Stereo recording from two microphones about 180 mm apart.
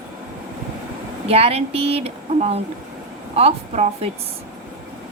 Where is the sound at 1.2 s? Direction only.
35° right (ahead or behind).